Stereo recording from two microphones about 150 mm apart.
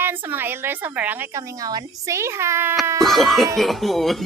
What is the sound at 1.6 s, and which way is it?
A woman's voice, 20° right (ahead or behind).